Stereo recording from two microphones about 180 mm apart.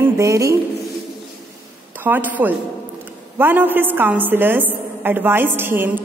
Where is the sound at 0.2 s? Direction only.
15° right (ahead or behind).